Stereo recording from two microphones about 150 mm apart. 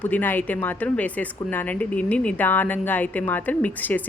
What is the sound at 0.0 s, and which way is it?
Speech, 10° left (ahead or behind).